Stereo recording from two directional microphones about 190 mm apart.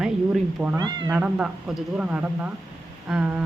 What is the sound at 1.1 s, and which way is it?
A woman's voice, 5° right (ahead or behind).